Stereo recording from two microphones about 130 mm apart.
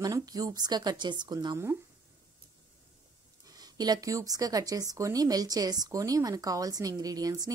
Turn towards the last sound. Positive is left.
turn(degrees=-30)  # may be behind; listen again after turning